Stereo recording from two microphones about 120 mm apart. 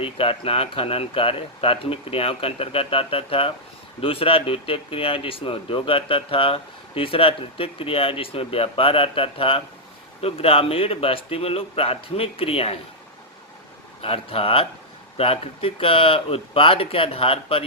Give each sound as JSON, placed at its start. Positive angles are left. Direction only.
{"t": 0.0, "sound": "speech", "side_deg": 50}
{"t": 14.0, "sound": "speech", "side_deg": 50}